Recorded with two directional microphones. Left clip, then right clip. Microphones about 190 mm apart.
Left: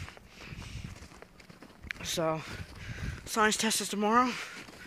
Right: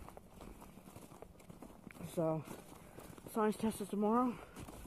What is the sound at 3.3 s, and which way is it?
Speech, 10° left (ahead or behind).